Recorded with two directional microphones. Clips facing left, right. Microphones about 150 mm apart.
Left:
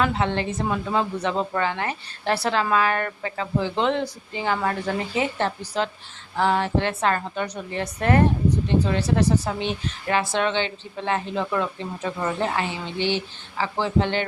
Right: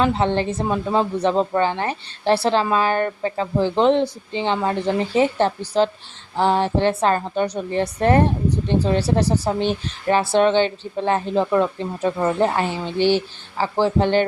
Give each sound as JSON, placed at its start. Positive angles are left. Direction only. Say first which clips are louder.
{"t": 0.0, "sound": "a woman's voice", "louder": "right 4 dB", "side_deg": -30}